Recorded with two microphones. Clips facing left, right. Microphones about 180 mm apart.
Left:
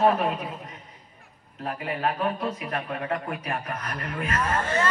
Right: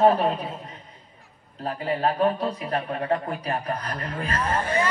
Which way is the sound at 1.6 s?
30° right (ahead or behind).